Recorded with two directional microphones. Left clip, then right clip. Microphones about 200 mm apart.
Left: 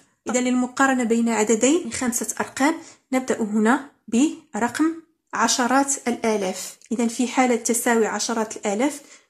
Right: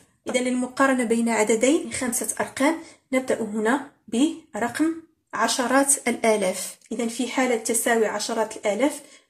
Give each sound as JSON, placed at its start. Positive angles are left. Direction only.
{"t": 0.2, "sound": "speech", "side_deg": 20}
{"t": 6.9, "sound": "speech", "side_deg": 25}